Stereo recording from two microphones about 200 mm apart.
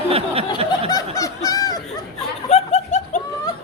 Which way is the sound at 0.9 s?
15° left (ahead or behind).